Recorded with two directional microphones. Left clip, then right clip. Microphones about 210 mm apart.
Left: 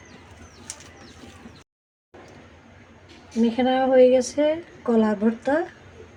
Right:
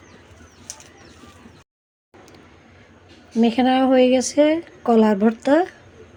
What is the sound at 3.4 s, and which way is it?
A woman's voice, 40° right (ahead or behind).